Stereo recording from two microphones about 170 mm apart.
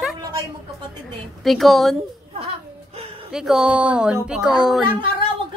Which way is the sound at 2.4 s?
35° right (ahead or behind).